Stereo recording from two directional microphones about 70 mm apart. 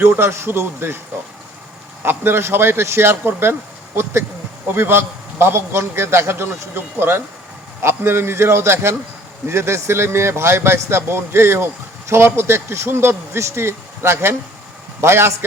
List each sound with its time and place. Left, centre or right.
0.0 s speech: right
2.0 s speech: right
4.7 s speech: right